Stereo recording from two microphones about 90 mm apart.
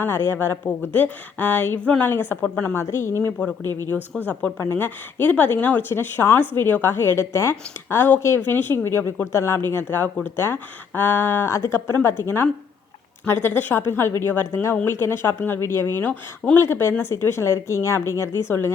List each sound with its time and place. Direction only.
0.0 s speech: 25° left (ahead or behind)
3.2 s speech: 15° left (ahead or behind)
3.6 s speech: 30° left (ahead or behind)
4.3 s speech: 15° left (ahead or behind)
4.6 s speech: 25° left (ahead or behind)